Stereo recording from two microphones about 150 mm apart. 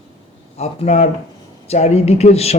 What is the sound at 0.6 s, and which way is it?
A man's voice, 45° left (ahead or behind).